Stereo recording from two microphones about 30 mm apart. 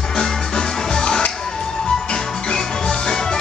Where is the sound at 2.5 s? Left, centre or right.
Left.